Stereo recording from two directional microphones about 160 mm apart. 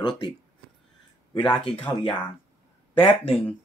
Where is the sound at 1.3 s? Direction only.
30° left (ahead or behind).